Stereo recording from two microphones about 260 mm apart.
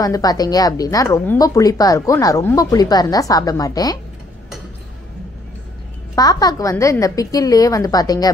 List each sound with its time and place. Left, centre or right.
0.0 s a woman's voice: centre
6.1 s a woman's voice: centre